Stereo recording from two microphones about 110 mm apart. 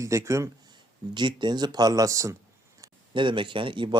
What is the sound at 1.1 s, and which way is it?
Speech, 45° right (ahead or behind).